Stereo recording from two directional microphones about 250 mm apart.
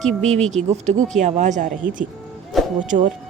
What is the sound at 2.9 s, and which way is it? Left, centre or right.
Speech, right.